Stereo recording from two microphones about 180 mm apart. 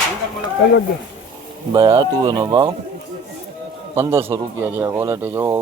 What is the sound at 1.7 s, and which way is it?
Speech, 20° right (ahead or behind).